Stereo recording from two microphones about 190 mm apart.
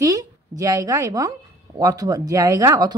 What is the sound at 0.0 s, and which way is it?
A woman's voice, 20° right (ahead or behind).